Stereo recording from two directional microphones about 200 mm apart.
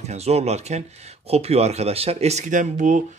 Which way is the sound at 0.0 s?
30° right (ahead or behind).